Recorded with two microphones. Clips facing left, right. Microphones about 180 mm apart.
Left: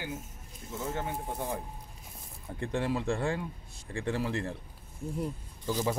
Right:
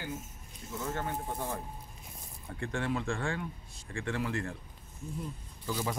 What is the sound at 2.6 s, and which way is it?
Speech, 35° left (ahead or behind).